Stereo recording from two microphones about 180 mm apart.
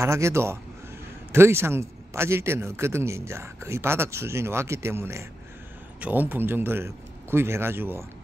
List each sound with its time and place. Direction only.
0.0 s a man's voice: 15° right (ahead or behind)